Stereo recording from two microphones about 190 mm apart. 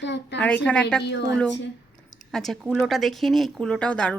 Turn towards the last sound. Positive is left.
turn(degrees=5)  # may be behind; listen again after turning